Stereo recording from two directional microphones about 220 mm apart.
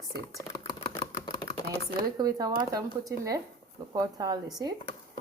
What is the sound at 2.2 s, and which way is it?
Speech, 15° right (ahead or behind).